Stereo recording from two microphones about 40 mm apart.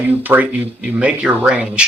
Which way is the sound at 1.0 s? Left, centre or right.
Right.